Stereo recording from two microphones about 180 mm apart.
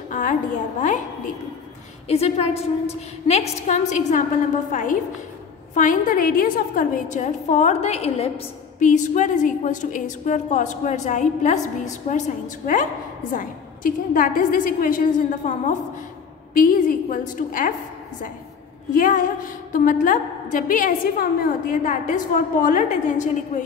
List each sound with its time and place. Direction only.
0.1 s a woman's voice: 45° left (ahead or behind)
2.0 s a woman's voice: 35° left (ahead or behind)
18.9 s a woman's voice: 50° left (ahead or behind)